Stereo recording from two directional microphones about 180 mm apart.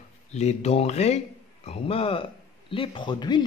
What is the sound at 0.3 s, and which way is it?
Speech, 40° left (ahead or behind).